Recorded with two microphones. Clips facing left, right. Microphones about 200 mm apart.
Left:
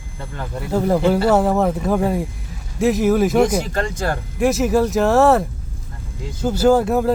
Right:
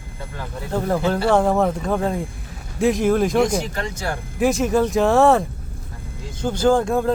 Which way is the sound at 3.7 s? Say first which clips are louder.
Left 5 dB; 50° left (ahead or behind).